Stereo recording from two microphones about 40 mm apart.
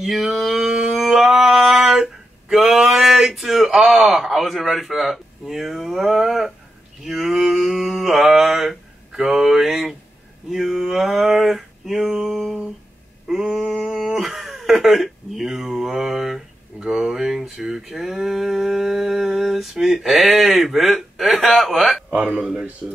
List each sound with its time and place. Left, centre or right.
0.0 s a sound: centre
2.9 s a man's voice: centre
7.1 s mantra: centre
10.5 s a sound: centre
16.8 s speech: centre
22.1 s speech: right